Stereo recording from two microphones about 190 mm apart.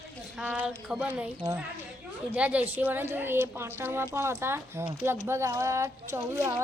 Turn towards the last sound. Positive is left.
turn(degrees=-15)  # may be behind; listen again after turning